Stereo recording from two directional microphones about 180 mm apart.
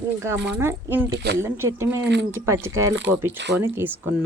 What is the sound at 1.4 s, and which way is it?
Speech, 15° right (ahead or behind).